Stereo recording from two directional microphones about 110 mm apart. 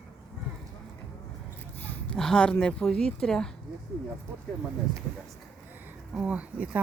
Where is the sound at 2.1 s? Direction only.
5° left (ahead or behind).